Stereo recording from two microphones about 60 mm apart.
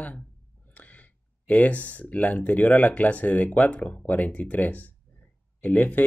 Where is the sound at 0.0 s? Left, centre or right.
Left.